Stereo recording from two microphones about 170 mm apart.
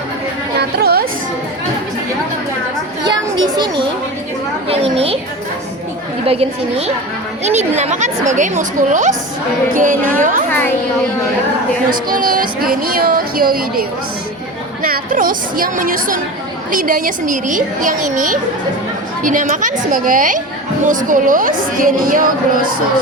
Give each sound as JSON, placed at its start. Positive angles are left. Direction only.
{"t": 0.8, "sound": "music", "side_deg": -65}
{"t": 3.0, "sound": "a sound", "side_deg": -25}
{"t": 4.7, "sound": "a woman's voice", "side_deg": -35}
{"t": 6.2, "sound": "a woman's voice", "side_deg": -35}
{"t": 12.1, "sound": "a woman's voice", "side_deg": -55}